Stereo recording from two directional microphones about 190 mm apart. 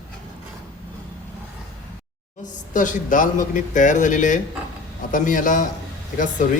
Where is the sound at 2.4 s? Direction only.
40° left (ahead or behind).